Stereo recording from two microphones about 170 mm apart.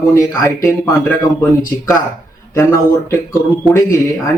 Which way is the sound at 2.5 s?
15° left (ahead or behind).